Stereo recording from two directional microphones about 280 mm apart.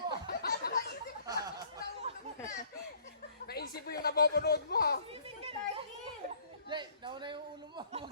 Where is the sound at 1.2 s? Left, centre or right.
Centre.